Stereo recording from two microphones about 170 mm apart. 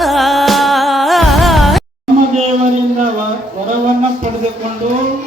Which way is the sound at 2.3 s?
45° right (ahead or behind).